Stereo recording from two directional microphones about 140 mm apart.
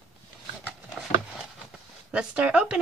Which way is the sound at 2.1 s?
10° right (ahead or behind).